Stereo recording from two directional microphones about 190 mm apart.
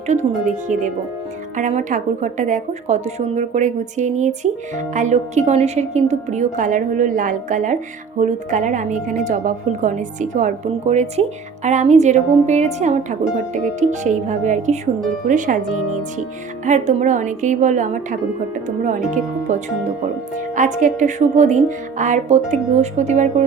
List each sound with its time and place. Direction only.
0.1 s speech: 40° right (ahead or behind)